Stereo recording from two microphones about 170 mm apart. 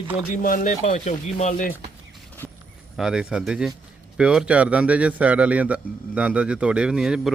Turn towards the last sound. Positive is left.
turn(degrees=-5)  # may be behind; listen again after turning